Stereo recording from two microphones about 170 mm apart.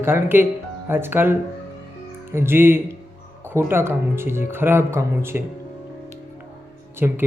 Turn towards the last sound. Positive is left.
turn(degrees=-10)  # may be behind; listen again after turning